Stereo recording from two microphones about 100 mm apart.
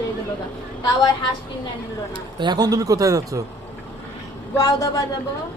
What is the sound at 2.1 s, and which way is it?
Speech, 50° right (ahead or behind).